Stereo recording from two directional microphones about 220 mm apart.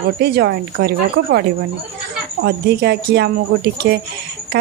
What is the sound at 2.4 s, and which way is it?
Speech, 50° right (ahead or behind).